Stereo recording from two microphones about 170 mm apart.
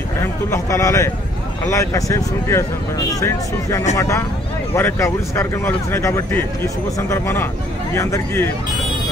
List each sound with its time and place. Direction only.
0.2 s a man's voice: 15° left (ahead or behind)